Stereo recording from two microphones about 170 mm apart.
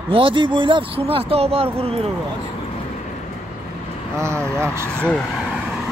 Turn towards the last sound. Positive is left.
turn(degrees=5)  # may be behind; listen again after turning